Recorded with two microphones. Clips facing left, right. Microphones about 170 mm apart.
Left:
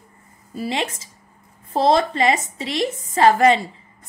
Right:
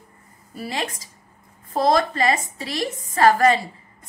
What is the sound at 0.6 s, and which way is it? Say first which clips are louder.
A woman's voice: left 4 dB; 25° left (ahead or behind).